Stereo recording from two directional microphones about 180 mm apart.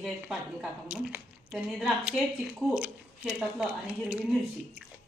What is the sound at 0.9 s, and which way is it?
Speech, 5° right (ahead or behind).